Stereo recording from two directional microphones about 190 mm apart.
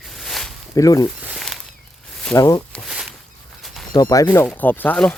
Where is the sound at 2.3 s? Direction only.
15° left (ahead or behind).